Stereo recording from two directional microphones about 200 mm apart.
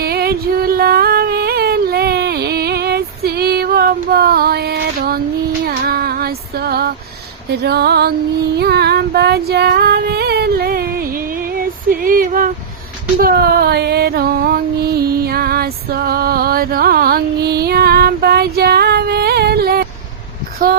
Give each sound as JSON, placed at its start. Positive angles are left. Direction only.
{"t": 0.0, "sound": "music", "side_deg": -50}
{"t": 5.6, "sound": "female singing", "side_deg": -50}
{"t": 7.5, "sound": "music", "side_deg": -55}
{"t": 8.5, "sound": "female singing", "side_deg": -55}
{"t": 11.9, "sound": "music", "side_deg": -45}